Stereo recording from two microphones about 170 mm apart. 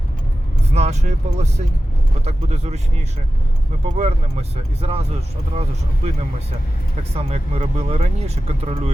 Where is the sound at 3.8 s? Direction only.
40° right (ahead or behind).